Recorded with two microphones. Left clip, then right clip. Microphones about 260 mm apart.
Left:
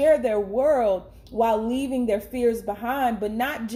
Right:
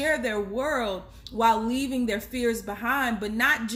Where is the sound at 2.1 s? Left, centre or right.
Right.